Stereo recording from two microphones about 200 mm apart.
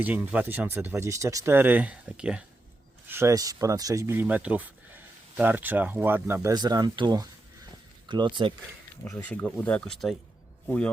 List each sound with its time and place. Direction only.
0.0 s speech: 5° right (ahead or behind); by 8.5 s 25° right (ahead or behind)
9.0 s speech: 5° left (ahead or behind)